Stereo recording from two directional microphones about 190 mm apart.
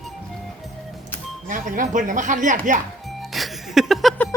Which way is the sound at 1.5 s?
45° right (ahead or behind).